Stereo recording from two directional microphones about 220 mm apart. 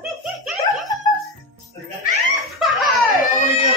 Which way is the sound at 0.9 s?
15° left (ahead or behind).